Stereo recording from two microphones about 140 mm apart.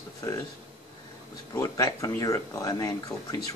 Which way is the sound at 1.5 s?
20° left (ahead or behind).